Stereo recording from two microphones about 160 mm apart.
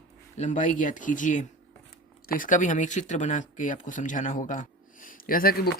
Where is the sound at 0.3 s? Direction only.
50° left (ahead or behind).